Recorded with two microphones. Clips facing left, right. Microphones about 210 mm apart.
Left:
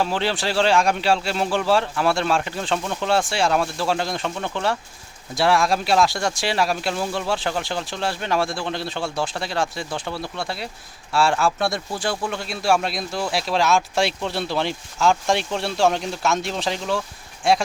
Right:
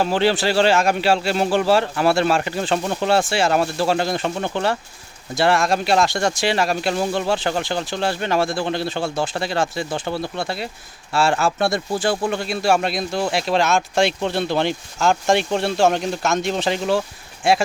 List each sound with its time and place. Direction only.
0.0 s speech: centre (ahead or behind)
2.7 s speech: 35° right (ahead or behind)
3.1 s speech: 5° right (ahead or behind)
4.4 s speech: 30° right (ahead or behind)
5.3 s speech: centre (ahead or behind)